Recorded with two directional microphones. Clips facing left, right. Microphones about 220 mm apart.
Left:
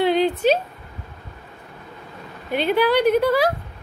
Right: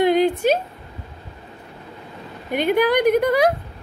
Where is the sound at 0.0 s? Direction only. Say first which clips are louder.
Right 2 dB; 10° right (ahead or behind).